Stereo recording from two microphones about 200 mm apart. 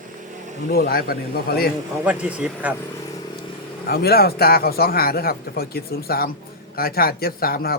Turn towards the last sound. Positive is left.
turn(degrees=50)  # may be behind; listen again after turning